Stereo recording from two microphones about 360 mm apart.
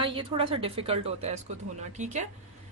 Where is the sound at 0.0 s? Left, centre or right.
Centre.